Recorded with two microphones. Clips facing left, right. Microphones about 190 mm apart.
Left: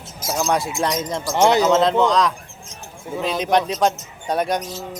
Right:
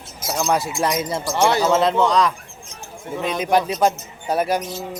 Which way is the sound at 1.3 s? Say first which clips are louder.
Left 3 dB; 20° left (ahead or behind).